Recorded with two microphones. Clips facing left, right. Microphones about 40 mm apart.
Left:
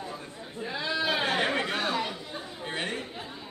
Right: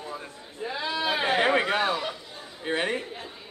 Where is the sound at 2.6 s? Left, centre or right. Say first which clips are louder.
Right 6 dB; centre.